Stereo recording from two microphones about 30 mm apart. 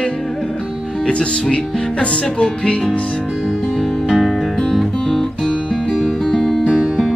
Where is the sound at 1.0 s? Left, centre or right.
Left.